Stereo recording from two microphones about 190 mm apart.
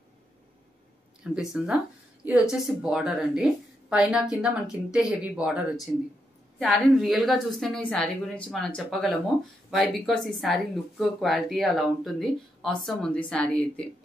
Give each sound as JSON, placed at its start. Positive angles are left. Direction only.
{"t": 1.2, "sound": "speech", "side_deg": -5}
{"t": 2.8, "sound": "speech", "side_deg": -5}